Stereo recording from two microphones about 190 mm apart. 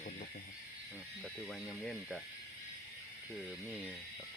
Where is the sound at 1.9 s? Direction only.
Centre (ahead or behind).